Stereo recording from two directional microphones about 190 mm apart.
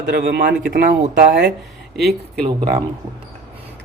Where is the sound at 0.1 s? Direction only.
50° right (ahead or behind).